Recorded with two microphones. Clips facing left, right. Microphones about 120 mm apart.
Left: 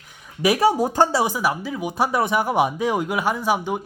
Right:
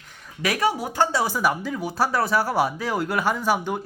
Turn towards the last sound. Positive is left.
turn(degrees=10)  # may be behind; listen again after turning